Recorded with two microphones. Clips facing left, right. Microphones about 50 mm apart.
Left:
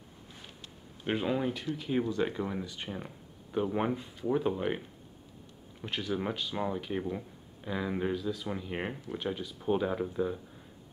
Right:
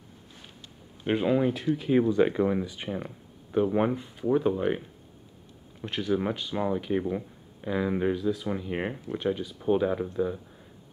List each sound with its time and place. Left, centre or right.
1.0 s speech: centre